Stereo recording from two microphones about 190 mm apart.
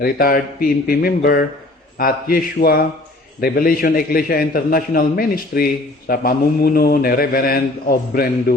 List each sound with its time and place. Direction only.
0.0 s a man's voice: 50° left (ahead or behind)